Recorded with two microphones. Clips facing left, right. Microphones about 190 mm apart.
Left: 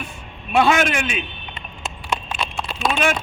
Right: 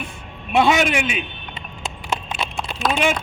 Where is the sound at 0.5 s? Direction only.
15° right (ahead or behind).